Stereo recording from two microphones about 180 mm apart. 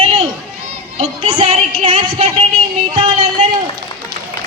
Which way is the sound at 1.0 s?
30° right (ahead or behind).